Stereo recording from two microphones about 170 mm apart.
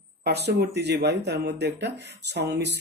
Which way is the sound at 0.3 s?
75° right (ahead or behind).